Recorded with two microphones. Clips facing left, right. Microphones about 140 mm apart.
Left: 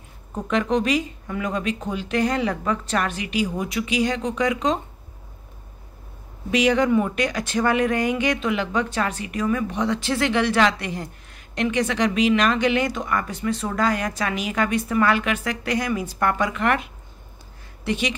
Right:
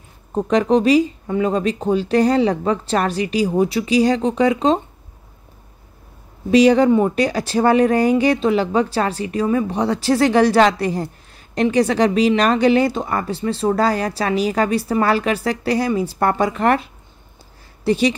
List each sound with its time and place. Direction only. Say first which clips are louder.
0.3 s speech: right 6 dB; 35° right (ahead or behind)
6.5 s speech: right 7 dB; 35° right (ahead or behind)